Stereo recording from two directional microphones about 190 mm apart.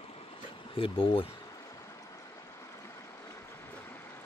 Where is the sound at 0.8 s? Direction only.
30° left (ahead or behind).